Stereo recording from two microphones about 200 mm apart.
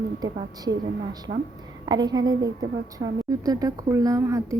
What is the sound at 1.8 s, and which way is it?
A woman's voice, 20° right (ahead or behind).